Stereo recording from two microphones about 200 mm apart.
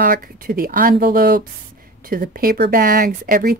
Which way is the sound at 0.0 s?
45° right (ahead or behind).